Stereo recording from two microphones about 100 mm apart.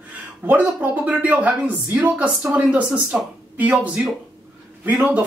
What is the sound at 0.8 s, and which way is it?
Speech, 15° right (ahead or behind).